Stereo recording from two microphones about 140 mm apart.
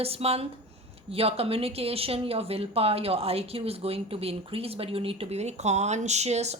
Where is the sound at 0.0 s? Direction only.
45° right (ahead or behind).